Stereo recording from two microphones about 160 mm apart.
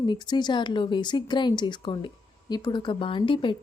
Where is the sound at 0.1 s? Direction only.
25° left (ahead or behind).